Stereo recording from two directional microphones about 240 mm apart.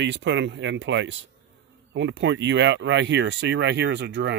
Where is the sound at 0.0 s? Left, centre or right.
Right.